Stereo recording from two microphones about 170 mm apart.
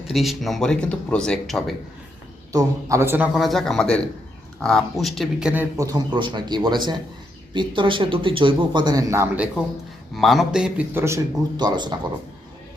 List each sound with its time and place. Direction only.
0.1 s speech: centre (ahead or behind)
2.5 s a man's voice: 20° right (ahead or behind)
3.3 s speech: centre (ahead or behind)
5.7 s speech: 20° right (ahead or behind)
10.2 s a man's voice: centre (ahead or behind); by 11.9 s 25° right (ahead or behind)